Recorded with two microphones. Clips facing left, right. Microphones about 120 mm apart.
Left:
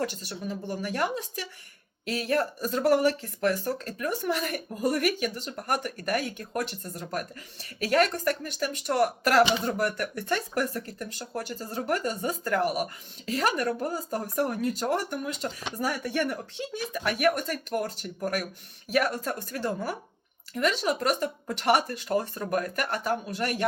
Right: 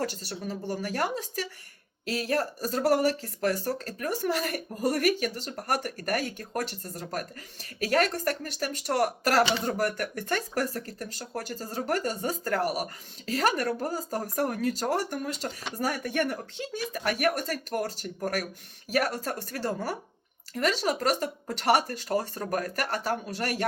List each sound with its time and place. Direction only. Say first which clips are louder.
0.0 s speech: left 1 dB; 40° right (ahead or behind)